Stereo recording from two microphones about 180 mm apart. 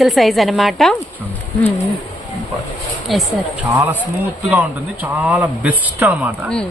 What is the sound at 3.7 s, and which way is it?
Speech, 15° right (ahead or behind).